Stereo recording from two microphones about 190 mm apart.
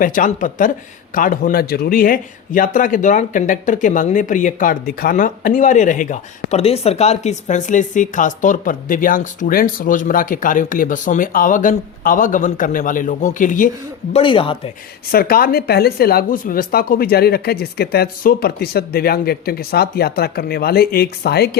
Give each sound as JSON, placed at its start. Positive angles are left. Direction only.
{"t": 0.0, "sound": "a man's voice", "side_deg": 45}
{"t": 14.1, "sound": "speech", "side_deg": 25}
{"t": 15.1, "sound": "a man's voice", "side_deg": 50}